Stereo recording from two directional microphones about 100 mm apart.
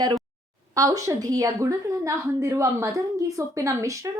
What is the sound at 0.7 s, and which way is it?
A woman's voice, 35° right (ahead or behind).